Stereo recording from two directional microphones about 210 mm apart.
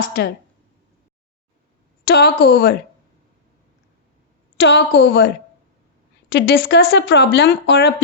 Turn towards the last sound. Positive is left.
turn(degrees=50)  # may be behind; listen again after turning